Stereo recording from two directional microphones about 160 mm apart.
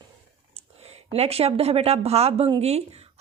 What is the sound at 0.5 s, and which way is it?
Speech, 40° right (ahead or behind).